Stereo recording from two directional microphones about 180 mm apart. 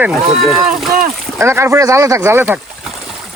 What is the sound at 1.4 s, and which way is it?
Speech, 15° right (ahead or behind).